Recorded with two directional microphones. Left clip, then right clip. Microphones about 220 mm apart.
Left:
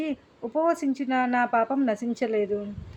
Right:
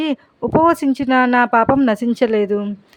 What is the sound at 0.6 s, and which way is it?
Speech, 40° right (ahead or behind).